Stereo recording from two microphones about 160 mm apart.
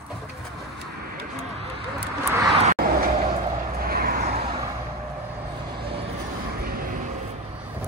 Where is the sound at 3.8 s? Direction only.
70° right (ahead or behind).